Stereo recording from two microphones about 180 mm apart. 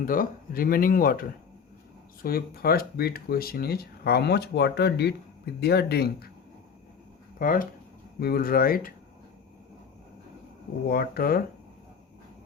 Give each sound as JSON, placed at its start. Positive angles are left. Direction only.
{"t": 0.0, "sound": "speech", "side_deg": 50}
{"t": 2.2, "sound": "speech", "side_deg": 55}
{"t": 7.3, "sound": "speech", "side_deg": 50}
{"t": 10.8, "sound": "speech", "side_deg": 55}